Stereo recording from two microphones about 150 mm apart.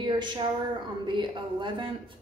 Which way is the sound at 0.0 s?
30° right (ahead or behind).